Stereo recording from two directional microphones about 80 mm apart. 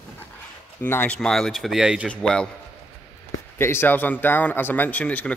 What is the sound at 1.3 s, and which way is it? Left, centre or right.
Speech, centre.